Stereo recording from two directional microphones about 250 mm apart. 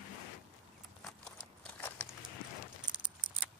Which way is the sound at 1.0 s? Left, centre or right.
Centre.